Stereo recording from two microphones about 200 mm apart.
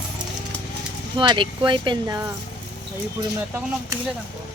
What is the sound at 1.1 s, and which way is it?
Speech, 25° right (ahead or behind).